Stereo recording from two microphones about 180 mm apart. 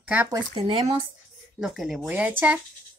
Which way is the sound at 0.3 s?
30° right (ahead or behind).